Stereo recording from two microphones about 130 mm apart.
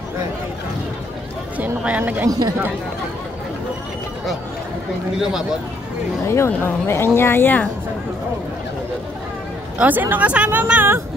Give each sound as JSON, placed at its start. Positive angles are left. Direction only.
{"t": 1.6, "sound": "speech", "side_deg": -10}
{"t": 2.2, "sound": "speech", "side_deg": -30}
{"t": 6.2, "sound": "speech", "side_deg": 20}
{"t": 9.8, "sound": "speech", "side_deg": -15}